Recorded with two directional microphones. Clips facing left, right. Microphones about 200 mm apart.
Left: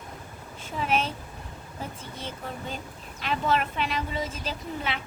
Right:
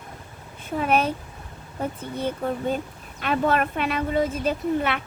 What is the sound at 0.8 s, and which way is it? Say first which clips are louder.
Speech: right 5 dB; 55° right (ahead or behind).